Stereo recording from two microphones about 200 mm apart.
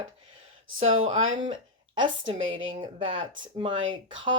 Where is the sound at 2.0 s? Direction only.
25° right (ahead or behind).